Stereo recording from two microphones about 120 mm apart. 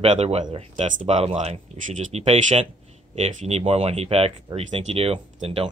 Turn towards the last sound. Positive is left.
turn(degrees=-55)  # may be behind; listen again after turning